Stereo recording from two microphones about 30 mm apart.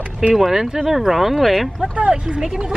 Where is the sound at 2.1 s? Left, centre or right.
Right.